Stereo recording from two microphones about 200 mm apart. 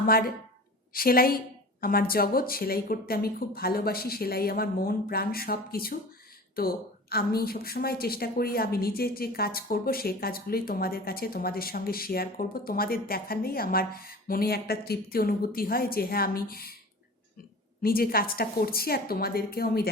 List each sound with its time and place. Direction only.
0.0 s a woman's voice: 50° left (ahead or behind)
17.8 s a woman's voice: 45° left (ahead or behind)